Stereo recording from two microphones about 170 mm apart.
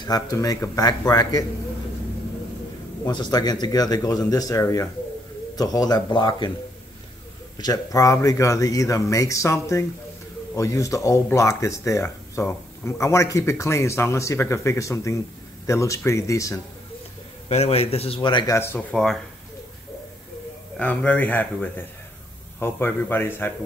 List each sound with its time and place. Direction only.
0.0 s speech: 20° left (ahead or behind)
3.1 s speech: 25° left (ahead or behind)
7.5 s speech: 20° left (ahead or behind)
17.5 s speech: 40° left (ahead or behind)
18.6 s speech: 15° left (ahead or behind)
20.7 s speech: 10° left (ahead or behind)